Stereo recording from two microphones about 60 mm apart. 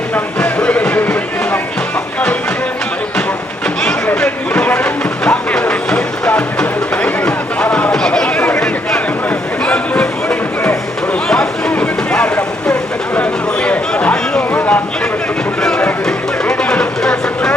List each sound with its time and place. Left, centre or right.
0.3 s music: left
4.1 s a sound: centre
5.2 s music: centre
7.9 s chatter: centre
8.5 s a sound: centre
9.6 s music: centre
12.1 s vehicle: centre
13.1 s a sound: centre
16.0 s vehicle: centre